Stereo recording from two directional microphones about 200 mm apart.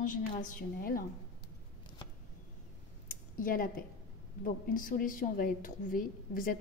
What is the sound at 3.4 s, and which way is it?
A woman's voice, 45° left (ahead or behind).